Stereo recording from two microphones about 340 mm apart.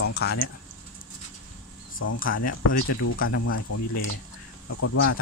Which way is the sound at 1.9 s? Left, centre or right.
Left.